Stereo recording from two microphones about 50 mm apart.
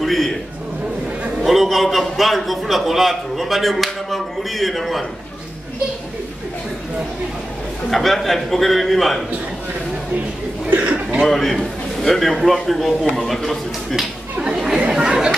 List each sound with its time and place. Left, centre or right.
0.0 s a man's voice: centre
1.4 s a man's voice: centre
7.9 s a man's voice: centre
10.7 s speech: right
11.2 s a man's voice: centre
15.0 s chatter: centre